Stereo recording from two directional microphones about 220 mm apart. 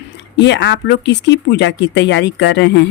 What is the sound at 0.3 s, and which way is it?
Speech, 50° left (ahead or behind).